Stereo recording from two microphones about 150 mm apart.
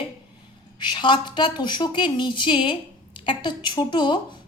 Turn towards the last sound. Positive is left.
turn(degrees=30)  # may be behind; listen again after turning